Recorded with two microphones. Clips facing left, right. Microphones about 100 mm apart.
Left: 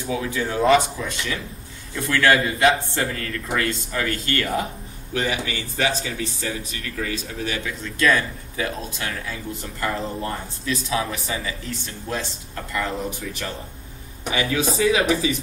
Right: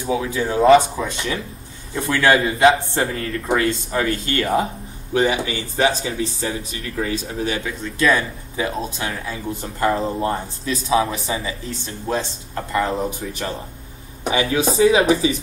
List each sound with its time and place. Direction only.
0.1 s speech: 25° right (ahead or behind)